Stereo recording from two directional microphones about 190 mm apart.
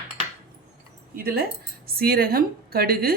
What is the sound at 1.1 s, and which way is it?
A woman's voice, 55° right (ahead or behind).